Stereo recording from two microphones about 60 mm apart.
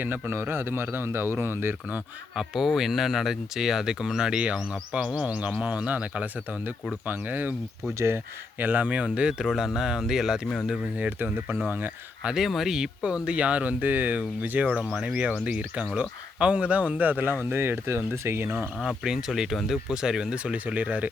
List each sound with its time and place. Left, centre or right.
0.0 s speech: right
2.3 s speech: centre; by 7.5 s right
7.9 s speech: right
8.5 s speech: right; by 10.6 s centre
10.9 s speech: right
12.2 s speech: centre; by 18.4 s right
19.0 s speech: centre; by 21.1 s right